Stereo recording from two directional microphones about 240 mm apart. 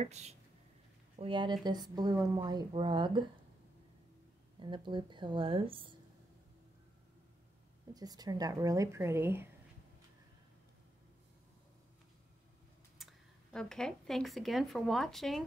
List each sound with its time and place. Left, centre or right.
0.0 s a woman's voice: right
4.6 s a woman's voice: centre
7.9 s speech: centre
13.0 s speech: centre